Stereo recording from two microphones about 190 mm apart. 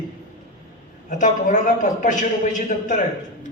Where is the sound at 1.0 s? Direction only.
40° left (ahead or behind).